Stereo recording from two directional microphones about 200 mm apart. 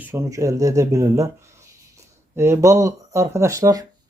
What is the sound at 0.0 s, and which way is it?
Speech, 15° right (ahead or behind).